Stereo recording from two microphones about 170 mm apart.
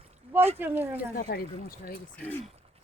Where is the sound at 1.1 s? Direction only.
60° left (ahead or behind).